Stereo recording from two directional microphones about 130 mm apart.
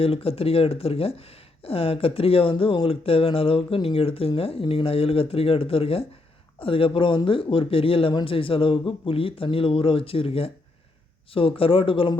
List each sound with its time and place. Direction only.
0.0 s speech: 45° left (ahead or behind)